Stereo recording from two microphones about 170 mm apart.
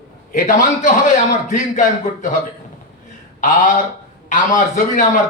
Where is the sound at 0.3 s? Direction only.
45° left (ahead or behind).